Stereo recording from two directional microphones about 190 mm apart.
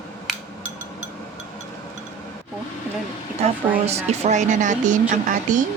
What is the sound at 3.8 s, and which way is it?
Speech, 35° right (ahead or behind).